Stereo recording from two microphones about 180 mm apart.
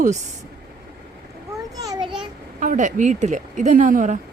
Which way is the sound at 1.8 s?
20° right (ahead or behind).